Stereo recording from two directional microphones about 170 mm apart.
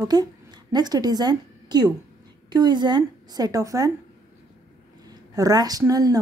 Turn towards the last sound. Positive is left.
turn(degrees=-20)  # may be behind; listen again after turning